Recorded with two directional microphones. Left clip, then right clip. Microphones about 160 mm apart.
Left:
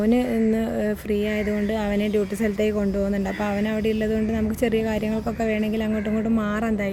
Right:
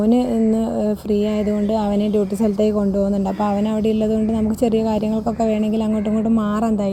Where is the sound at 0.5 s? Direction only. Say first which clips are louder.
Right 4 dB; 30° left (ahead or behind).